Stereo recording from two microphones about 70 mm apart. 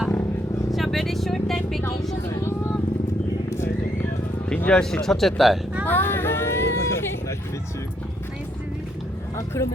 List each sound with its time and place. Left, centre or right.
0.7 s speech: centre
2.3 s speech: left
4.5 s speech: left
4.8 s speech: centre
5.8 s a sound: left
9.6 s speech: left